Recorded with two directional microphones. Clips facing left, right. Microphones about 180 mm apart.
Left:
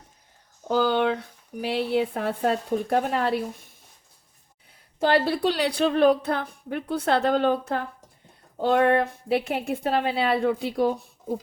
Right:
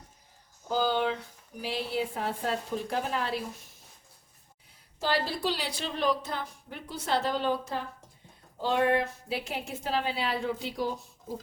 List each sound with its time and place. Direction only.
0.7 s a woman's voice: 65° left (ahead or behind)
4.9 s a woman's voice: 60° left (ahead or behind)